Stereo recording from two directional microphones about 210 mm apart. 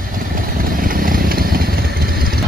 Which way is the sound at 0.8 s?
45° right (ahead or behind).